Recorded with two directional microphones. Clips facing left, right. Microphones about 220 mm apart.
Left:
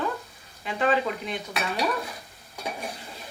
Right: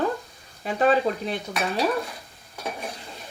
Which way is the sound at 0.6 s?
40° right (ahead or behind).